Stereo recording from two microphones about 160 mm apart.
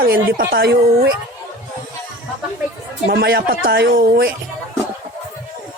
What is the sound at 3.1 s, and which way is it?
A man's voice, 85° right.